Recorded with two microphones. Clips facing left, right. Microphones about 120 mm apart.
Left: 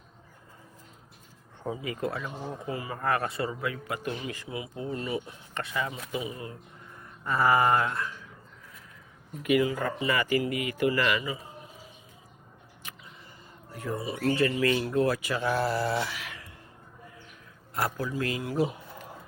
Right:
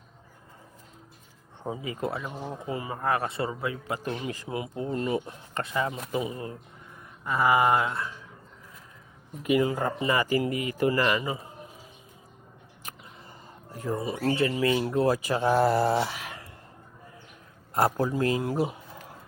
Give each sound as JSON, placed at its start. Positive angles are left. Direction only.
{"t": 1.6, "sound": "speech", "side_deg": -25}
{"t": 4.1, "sound": "speech", "side_deg": -40}
{"t": 7.3, "sound": "speech", "side_deg": -15}
{"t": 9.4, "sound": "speech", "side_deg": -30}
{"t": 13.7, "sound": "speech", "side_deg": -40}
{"t": 14.3, "sound": "speech", "side_deg": -20}
{"t": 15.5, "sound": "speech", "side_deg": -50}
{"t": 15.9, "sound": "a sound", "side_deg": -35}
{"t": 17.7, "sound": "speech", "side_deg": -40}